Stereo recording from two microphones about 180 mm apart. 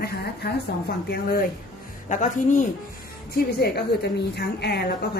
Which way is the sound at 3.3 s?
60° left (ahead or behind).